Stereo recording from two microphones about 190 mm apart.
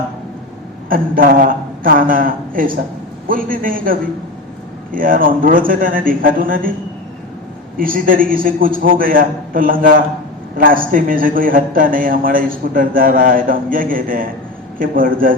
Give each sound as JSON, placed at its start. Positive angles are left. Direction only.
{"t": 0.9, "sound": "a man's voice", "side_deg": -45}
{"t": 7.8, "sound": "a man's voice", "side_deg": -45}